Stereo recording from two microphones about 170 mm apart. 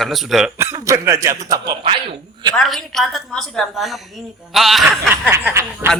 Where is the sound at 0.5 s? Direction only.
20° right (ahead or behind).